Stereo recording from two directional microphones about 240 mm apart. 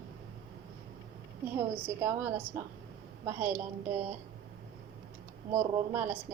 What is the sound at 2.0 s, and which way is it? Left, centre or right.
Speech, centre.